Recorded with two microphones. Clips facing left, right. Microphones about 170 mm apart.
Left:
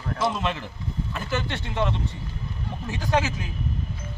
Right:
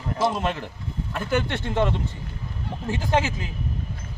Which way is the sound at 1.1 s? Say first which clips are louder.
Right 5 dB; 55° right (ahead or behind).